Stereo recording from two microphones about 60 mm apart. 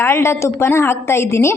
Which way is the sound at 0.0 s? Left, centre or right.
Left.